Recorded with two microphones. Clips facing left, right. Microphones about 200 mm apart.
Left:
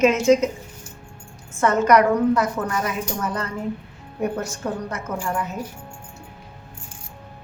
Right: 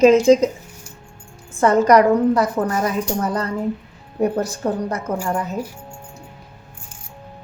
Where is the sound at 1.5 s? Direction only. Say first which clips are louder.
Right 3 dB; 35° right (ahead or behind).